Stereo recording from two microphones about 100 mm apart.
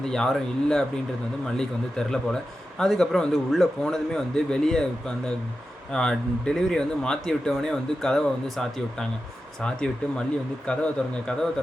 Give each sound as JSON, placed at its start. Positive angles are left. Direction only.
{"t": 0.0, "sound": "speech", "side_deg": 5}